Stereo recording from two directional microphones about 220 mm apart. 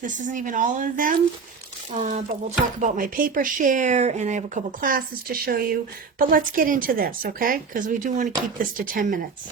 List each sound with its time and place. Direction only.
0.0 s speech: 35° right (ahead or behind)